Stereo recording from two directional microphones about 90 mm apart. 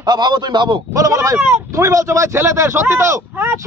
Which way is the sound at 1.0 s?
35° right (ahead or behind).